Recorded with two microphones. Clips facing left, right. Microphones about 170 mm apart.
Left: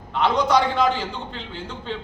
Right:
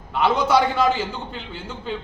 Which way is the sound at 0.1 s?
5° right (ahead or behind).